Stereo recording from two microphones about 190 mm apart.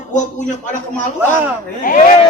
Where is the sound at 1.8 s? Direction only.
45° left (ahead or behind).